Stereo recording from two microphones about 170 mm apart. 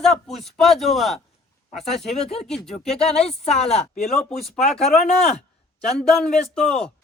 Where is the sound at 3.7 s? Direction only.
40° left (ahead or behind).